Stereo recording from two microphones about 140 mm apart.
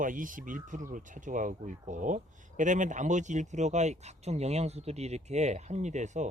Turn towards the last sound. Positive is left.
turn(degrees=-60)  # may be behind; listen again after turning